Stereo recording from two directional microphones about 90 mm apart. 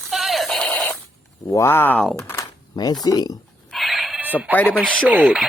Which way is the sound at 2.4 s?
45° left (ahead or behind).